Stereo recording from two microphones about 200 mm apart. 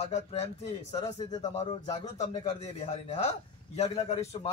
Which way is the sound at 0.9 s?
20° left (ahead or behind).